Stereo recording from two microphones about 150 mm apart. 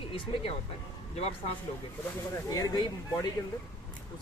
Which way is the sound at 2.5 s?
25° left (ahead or behind).